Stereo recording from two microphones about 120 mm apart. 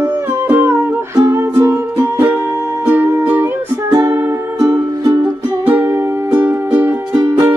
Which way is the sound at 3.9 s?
25° right (ahead or behind).